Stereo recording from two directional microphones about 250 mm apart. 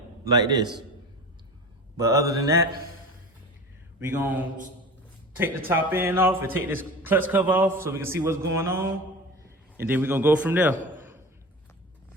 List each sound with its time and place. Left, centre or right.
0.3 s a man's voice: centre
2.0 s a man's voice: centre
4.1 s a man's voice: centre
5.4 s a man's voice: centre